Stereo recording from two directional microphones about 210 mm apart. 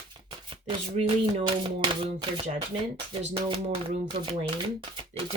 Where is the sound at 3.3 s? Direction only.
25° right (ahead or behind).